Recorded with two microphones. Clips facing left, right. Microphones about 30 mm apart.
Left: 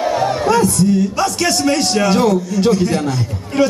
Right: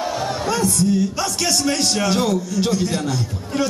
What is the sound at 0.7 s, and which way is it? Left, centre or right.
A man's voice, centre.